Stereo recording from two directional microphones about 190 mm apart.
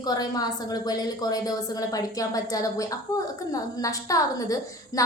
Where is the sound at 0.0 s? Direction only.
20° left (ahead or behind).